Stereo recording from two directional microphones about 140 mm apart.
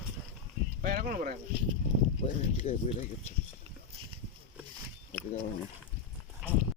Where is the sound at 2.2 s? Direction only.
55° left (ahead or behind).